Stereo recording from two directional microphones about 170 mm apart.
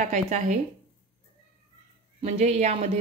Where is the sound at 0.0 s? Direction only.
45° right (ahead or behind).